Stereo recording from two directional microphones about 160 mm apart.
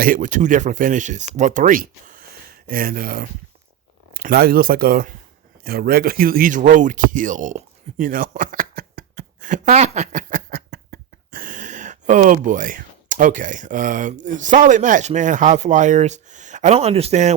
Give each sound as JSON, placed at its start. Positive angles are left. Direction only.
{"t": 0.0, "sound": "a man's voice", "side_deg": -60}